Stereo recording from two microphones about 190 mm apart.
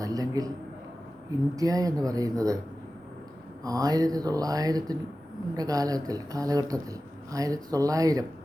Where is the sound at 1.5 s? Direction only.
20° right (ahead or behind).